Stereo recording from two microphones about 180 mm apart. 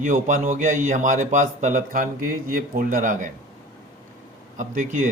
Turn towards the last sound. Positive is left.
turn(degrees=-50)  # may be behind; listen again after turning